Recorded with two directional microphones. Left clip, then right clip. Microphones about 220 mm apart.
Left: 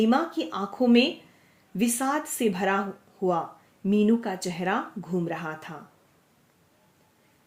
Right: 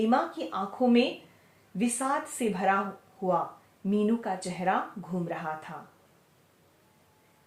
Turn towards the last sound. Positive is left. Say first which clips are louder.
# left 2 dB
turn(degrees=45)  # may be behind; listen again after turning